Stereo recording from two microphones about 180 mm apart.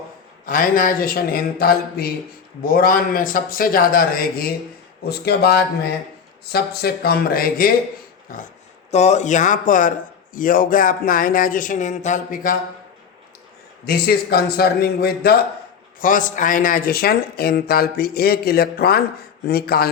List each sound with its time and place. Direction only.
0.4 s speech: 50° left (ahead or behind)
8.9 s speech: 40° left (ahead or behind)
13.8 s speech: 60° left (ahead or behind)
16.0 s speech: 50° left (ahead or behind)